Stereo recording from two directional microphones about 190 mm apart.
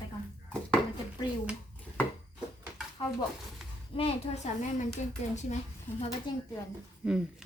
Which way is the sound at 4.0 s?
40° left (ahead or behind).